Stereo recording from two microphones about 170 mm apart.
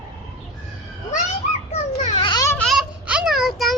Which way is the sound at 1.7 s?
40° left (ahead or behind).